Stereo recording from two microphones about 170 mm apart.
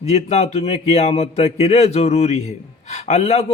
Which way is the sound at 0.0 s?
40° left (ahead or behind).